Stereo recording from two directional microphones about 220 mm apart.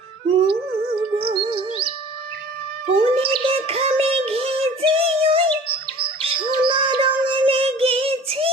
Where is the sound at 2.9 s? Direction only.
25° right (ahead or behind).